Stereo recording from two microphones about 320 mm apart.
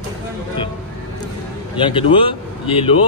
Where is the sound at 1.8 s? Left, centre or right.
Centre.